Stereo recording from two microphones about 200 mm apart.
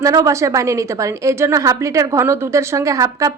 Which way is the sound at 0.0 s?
15° right (ahead or behind).